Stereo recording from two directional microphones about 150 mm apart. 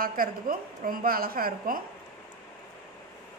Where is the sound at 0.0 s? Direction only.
75° right (ahead or behind).